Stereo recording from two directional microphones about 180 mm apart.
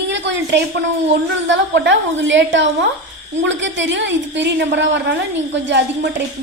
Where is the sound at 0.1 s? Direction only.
75° right (ahead or behind).